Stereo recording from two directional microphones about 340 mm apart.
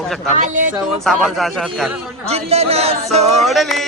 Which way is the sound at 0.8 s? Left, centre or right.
Centre.